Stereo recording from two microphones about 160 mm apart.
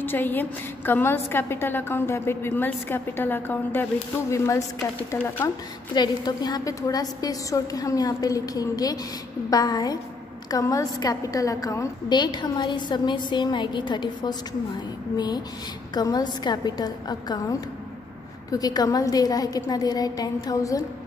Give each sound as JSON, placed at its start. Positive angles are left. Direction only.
{"t": 0.0, "sound": "a woman's voice", "side_deg": 10}
{"t": 5.9, "sound": "a woman's voice", "side_deg": 25}